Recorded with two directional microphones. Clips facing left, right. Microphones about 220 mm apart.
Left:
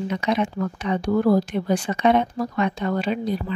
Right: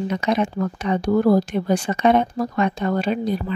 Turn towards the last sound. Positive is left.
turn(degrees=-45)  # may be behind; listen again after turning